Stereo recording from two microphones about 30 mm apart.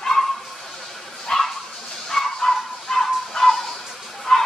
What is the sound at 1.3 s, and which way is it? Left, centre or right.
Dog, left.